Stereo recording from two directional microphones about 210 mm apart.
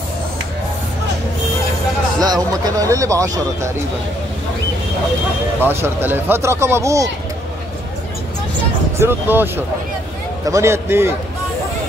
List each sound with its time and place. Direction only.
2.1 s speech: 20° right (ahead or behind)
5.6 s speech: 10° right (ahead or behind)
9.0 s speech: 10° right (ahead or behind)